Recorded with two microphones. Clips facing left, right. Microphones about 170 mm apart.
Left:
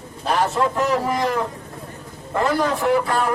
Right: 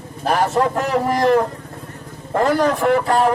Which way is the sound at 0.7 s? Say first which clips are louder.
Right 2 dB; 45° right (ahead or behind).